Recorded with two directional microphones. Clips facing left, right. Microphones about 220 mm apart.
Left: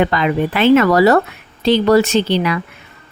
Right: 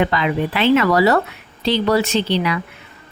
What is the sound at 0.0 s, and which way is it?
Speech, 50° left (ahead or behind).